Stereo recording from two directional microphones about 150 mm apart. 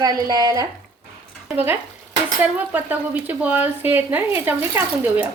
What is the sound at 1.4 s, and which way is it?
Stir, 15° right (ahead or behind).